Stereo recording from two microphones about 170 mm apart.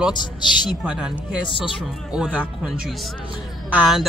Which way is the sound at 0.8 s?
5° right (ahead or behind).